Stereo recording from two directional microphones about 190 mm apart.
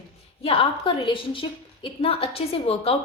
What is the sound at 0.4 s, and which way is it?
A woman's voice, 30° left (ahead or behind).